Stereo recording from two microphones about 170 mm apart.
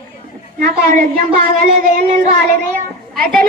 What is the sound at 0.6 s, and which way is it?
A woman's voice, 55° right (ahead or behind).